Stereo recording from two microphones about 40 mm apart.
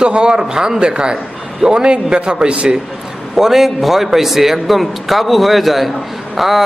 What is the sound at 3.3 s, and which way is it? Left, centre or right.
A man's voice, centre.